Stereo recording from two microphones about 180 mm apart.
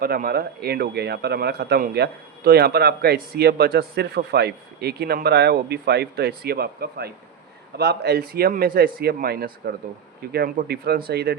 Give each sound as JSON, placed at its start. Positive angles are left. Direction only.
{"t": 0.0, "sound": "a man's voice", "side_deg": -55}